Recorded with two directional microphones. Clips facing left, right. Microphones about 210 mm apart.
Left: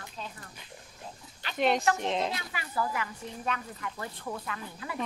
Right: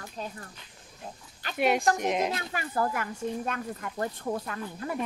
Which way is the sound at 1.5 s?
10° right (ahead or behind).